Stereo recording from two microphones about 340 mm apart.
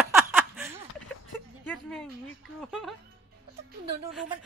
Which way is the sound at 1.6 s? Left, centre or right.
Centre.